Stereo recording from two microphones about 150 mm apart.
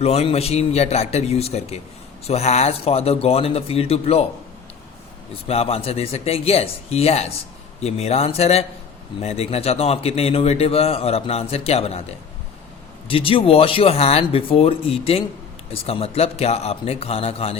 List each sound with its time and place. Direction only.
0.0 s a man's voice: 45° left (ahead or behind)
5.5 s a man's voice: 40° left (ahead or behind)
13.1 s a man's voice: 35° left (ahead or behind)